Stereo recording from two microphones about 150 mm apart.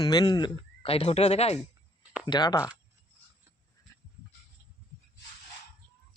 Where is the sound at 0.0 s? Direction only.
25° left (ahead or behind); by 1.5 s 45° left (ahead or behind).